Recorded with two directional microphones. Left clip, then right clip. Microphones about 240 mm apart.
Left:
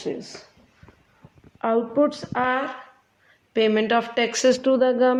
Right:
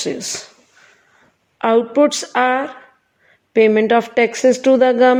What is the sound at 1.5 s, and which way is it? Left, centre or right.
Speech, right.